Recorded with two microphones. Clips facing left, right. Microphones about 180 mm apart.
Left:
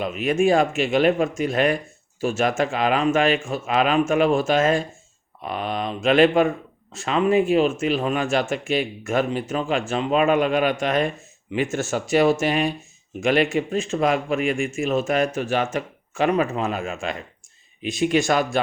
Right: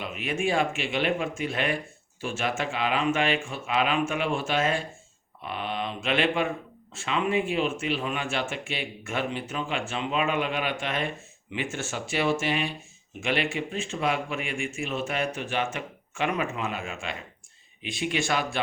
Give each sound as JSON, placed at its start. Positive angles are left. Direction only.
{"t": 0.0, "sound": "speech", "side_deg": 40}